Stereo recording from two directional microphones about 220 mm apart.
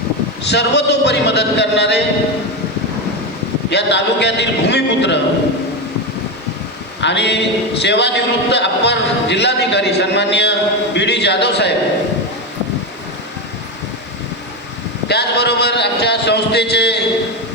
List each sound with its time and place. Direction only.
0.5 s a man's voice: 50° left (ahead or behind)
3.7 s a man's voice: 50° left (ahead or behind)
7.0 s a man's voice: 50° left (ahead or behind)
15.0 s a man's voice: 50° left (ahead or behind)